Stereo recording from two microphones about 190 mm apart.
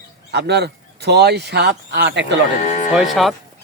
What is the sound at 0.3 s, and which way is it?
Speech, 60° right (ahead or behind).